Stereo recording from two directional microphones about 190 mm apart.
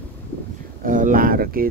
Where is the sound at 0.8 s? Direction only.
45° right (ahead or behind).